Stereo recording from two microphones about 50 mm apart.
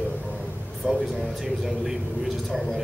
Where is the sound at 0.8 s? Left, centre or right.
Centre.